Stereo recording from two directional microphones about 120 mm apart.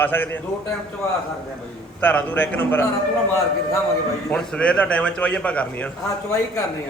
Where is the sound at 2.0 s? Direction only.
15° left (ahead or behind).